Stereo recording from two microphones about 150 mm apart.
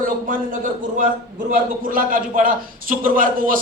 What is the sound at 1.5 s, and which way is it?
A man's voice, 65° right (ahead or behind).